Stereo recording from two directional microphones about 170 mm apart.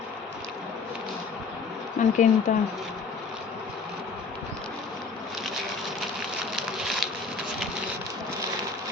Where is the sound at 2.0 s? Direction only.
45° left (ahead or behind).